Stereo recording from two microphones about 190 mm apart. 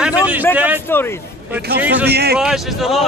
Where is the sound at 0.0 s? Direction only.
5° right (ahead or behind).